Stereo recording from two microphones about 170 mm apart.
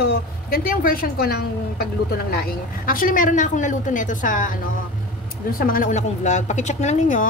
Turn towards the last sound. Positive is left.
turn(degrees=45)  # may be behind; listen again after turning